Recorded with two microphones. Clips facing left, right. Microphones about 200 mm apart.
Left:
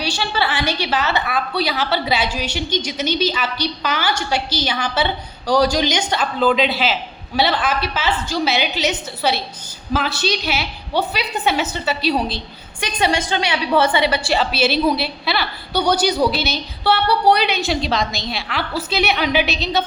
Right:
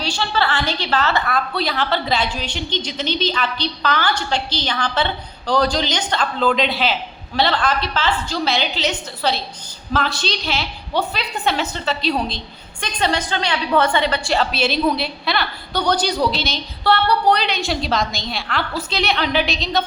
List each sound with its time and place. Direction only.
0.2 s a woman's voice: 10° left (ahead or behind)
1.2 s a woman's voice: 5° left (ahead or behind)
13.2 s a woman's voice: 20° left (ahead or behind)
13.9 s a woman's voice: 5° left (ahead or behind)